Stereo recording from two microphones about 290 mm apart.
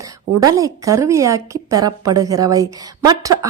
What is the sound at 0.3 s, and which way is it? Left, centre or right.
A woman's voice, centre.